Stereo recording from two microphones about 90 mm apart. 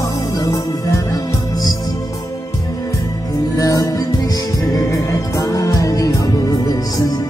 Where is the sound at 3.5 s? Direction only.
40° left (ahead or behind).